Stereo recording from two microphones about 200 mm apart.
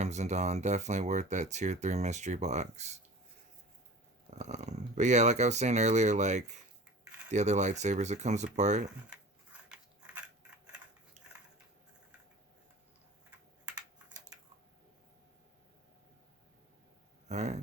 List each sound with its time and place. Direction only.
0.0 s speech: 35° right (ahead or behind)
4.4 s speech: 35° right (ahead or behind)
9.5 s biting: 5° right (ahead or behind)
13.7 s typing: 15° right (ahead or behind)
17.2 s speech: 35° right (ahead or behind)